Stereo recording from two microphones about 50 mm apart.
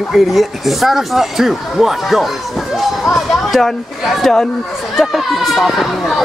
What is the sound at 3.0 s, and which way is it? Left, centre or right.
Speech, left.